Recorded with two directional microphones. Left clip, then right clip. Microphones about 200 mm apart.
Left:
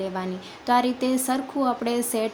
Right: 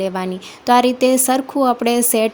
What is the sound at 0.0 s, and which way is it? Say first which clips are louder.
Speech: right 8 dB; 40° right (ahead or behind).